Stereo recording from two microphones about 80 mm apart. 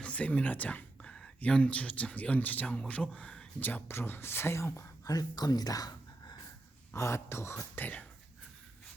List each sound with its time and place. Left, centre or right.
0.0 s speech: centre; by 6.3 s left
6.9 s speech: left